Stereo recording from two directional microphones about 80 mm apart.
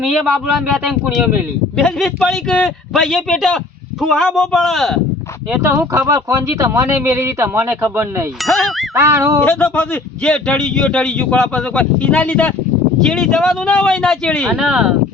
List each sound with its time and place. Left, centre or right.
0.0 s speech: centre
2.2 s speech: centre
2.9 s speech: centre
5.9 s speech: right
6.7 s a man's voice: right
8.4 s speech: centre
9.0 s a man's voice: right
9.4 s speech: left
13.0 s speech: centre
14.5 s speech: centre